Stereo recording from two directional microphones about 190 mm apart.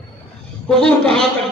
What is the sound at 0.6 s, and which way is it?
Speech, 5° left (ahead or behind).